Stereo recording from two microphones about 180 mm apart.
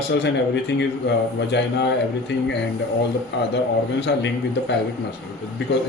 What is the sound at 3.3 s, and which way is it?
A man's voice, 80° left.